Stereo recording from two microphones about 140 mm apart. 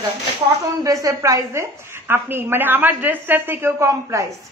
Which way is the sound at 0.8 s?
25° right (ahead or behind).